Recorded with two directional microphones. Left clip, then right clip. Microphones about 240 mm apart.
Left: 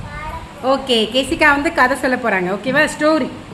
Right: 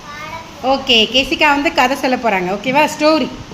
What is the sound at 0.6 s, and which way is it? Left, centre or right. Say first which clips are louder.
A woman's voice: right 3 dB; centre.